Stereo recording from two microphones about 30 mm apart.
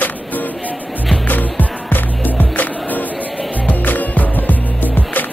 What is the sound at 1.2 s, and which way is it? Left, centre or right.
Music, left.